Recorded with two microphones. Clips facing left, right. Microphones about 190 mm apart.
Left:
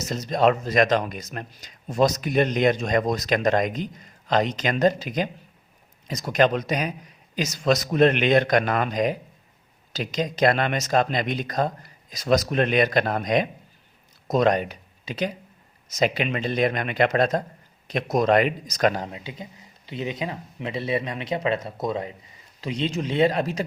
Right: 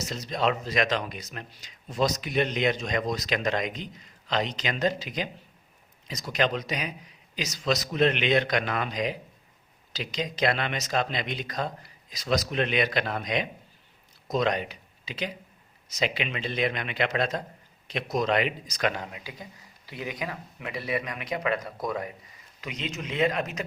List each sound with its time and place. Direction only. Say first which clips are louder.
0.0 s a man's voice: left 7 dB; 45° left (ahead or behind)